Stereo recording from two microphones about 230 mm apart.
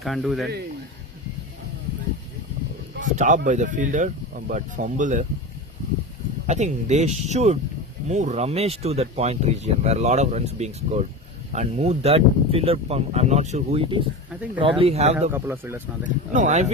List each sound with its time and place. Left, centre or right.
0.0 s speech: centre
3.0 s speech: right
6.5 s speech: right
15.3 s speech: centre
16.0 s speech: right